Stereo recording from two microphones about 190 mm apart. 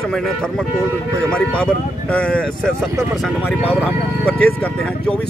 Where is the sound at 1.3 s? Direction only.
5° left (ahead or behind).